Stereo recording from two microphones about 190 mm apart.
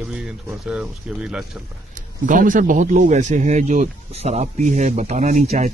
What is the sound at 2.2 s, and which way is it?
Speech, 45° right (ahead or behind).